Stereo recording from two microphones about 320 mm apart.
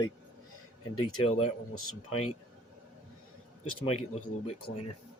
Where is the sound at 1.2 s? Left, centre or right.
Centre.